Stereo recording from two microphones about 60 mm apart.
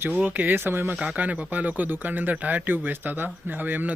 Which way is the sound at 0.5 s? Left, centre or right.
Right.